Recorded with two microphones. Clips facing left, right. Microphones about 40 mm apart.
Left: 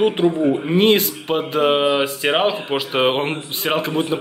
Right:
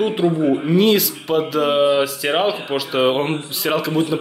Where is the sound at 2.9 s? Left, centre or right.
Left.